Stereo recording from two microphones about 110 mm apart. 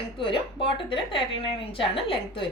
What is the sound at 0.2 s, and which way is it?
A woman's voice, 50° left (ahead or behind).